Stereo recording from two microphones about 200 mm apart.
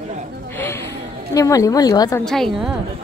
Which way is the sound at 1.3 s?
15° left (ahead or behind).